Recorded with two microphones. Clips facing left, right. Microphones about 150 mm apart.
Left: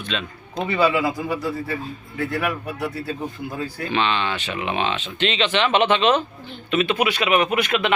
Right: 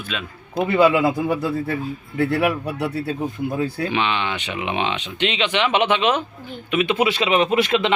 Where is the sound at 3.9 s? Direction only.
15° right (ahead or behind).